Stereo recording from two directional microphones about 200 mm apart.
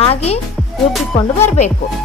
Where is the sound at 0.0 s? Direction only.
30° left (ahead or behind).